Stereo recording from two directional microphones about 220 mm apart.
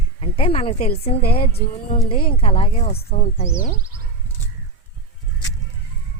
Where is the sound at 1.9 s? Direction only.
25° left (ahead or behind).